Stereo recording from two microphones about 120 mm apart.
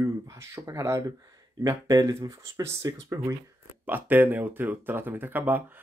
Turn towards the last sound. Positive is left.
turn(degrees=-15)  # may be behind; listen again after turning